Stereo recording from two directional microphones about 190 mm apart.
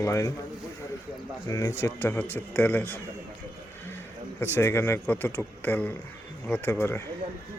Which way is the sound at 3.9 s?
10° left (ahead or behind).